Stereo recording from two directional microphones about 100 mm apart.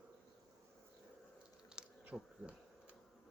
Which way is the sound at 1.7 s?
10° right (ahead or behind).